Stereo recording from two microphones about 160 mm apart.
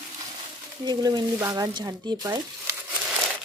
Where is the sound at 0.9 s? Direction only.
25° right (ahead or behind).